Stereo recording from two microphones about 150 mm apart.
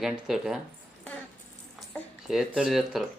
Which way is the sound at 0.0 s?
5° right (ahead or behind).